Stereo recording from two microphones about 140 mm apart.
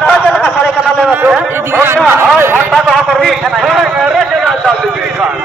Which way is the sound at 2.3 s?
15° right (ahead or behind).